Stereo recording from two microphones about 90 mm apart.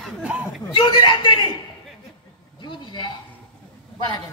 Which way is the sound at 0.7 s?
60° left (ahead or behind).